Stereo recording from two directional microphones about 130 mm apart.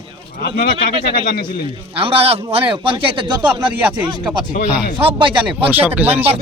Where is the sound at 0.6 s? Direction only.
90° left.